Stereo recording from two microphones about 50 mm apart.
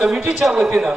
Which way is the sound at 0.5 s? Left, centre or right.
Centre.